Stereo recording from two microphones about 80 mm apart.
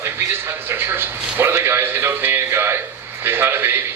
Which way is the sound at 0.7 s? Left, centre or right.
Right.